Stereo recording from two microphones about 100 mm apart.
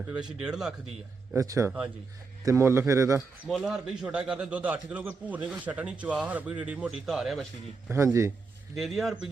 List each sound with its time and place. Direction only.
0.3 s a man's voice: 5° right (ahead or behind)
1.4 s a man's voice: 35° right (ahead or behind)
3.6 s a man's voice: 5° right (ahead or behind)
7.9 s a man's voice: 30° right (ahead or behind)
8.7 s speech: centre (ahead or behind)